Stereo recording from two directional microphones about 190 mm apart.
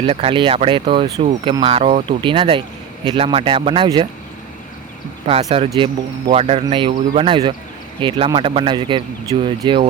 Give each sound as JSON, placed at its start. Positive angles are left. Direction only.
{"t": 0.0, "sound": "speech", "side_deg": -30}
{"t": 5.2, "sound": "speech", "side_deg": -35}